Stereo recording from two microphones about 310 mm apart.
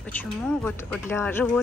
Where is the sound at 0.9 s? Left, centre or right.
Centre.